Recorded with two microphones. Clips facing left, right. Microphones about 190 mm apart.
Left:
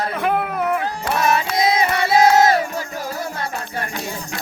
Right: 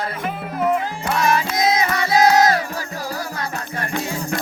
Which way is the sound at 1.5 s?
30° left (ahead or behind).